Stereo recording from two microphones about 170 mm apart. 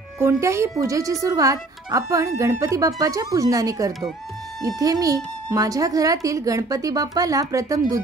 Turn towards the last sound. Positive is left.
turn(degrees=-20)  # may be behind; listen again after turning